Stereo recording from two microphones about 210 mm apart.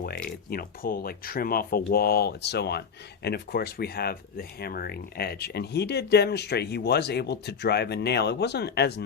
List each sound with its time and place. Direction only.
0.0 s speech: 45° left (ahead or behind)